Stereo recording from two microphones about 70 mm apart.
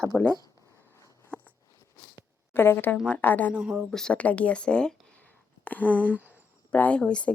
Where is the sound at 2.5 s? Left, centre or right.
Left.